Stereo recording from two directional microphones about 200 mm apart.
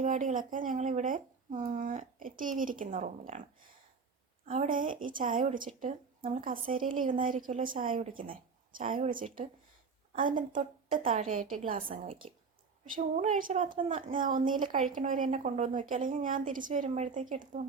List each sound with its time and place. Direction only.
0.0 s speech: 40° right (ahead or behind)
4.4 s a woman's voice: 35° right (ahead or behind)